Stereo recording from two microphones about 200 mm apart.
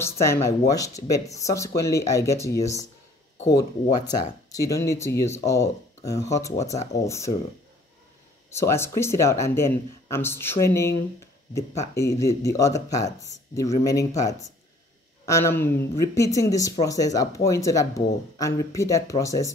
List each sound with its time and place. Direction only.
0.0 s speech: 15° left (ahead or behind)
8.5 s speech: 15° left (ahead or behind)
11.9 s speech: 15° left (ahead or behind)